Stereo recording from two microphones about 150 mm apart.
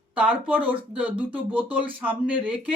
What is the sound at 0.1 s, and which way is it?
Speech, 10° right (ahead or behind).